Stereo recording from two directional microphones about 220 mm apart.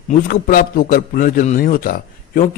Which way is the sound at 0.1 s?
40° left (ahead or behind).